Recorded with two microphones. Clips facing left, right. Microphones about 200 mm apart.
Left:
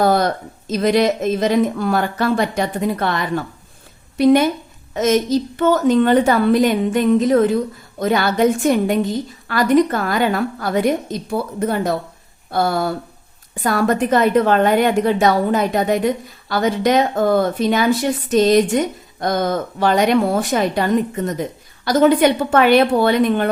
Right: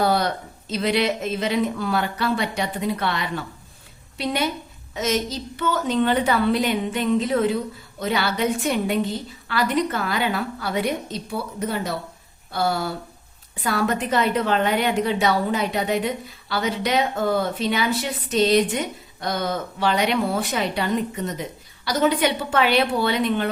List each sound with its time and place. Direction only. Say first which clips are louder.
0.0 s a woman's voice: left 5 dB; 45° left (ahead or behind)